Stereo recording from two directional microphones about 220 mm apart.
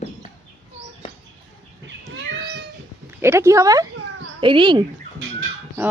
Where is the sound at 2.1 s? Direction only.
55° right (ahead or behind).